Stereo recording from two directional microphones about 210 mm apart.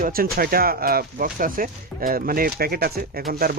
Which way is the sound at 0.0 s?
45° right (ahead or behind).